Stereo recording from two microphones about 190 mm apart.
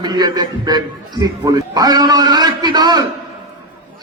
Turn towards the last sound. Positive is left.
turn(degrees=-20)  # may be behind; listen again after turning